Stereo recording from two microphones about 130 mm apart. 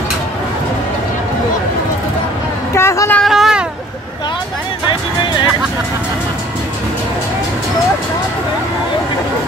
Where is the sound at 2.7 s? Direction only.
20° left (ahead or behind).